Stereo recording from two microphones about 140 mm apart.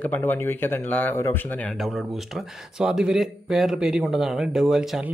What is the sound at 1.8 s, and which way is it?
Speech, centre (ahead or behind).